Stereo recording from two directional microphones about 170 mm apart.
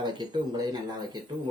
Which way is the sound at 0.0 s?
25° right (ahead or behind).